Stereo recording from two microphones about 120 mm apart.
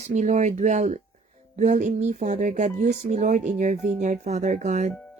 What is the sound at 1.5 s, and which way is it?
Speech, 90° right.